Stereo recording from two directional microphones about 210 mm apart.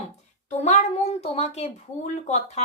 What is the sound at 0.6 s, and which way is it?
A child's voice, 30° left (ahead or behind).